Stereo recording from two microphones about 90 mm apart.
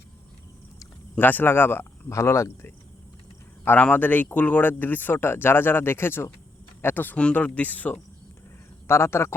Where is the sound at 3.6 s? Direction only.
20° left (ahead or behind).